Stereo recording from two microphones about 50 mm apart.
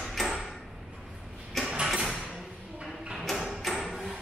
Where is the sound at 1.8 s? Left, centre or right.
Centre.